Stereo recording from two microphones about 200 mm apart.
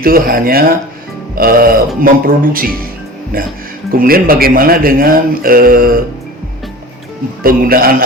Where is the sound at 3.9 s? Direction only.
45° right (ahead or behind).